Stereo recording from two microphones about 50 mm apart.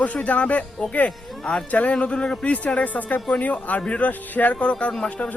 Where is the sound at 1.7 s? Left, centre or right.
Left.